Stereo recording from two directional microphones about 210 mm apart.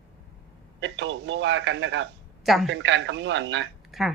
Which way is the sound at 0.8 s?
60° right (ahead or behind).